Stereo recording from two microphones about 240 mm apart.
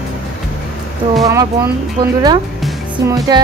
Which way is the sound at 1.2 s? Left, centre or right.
Centre.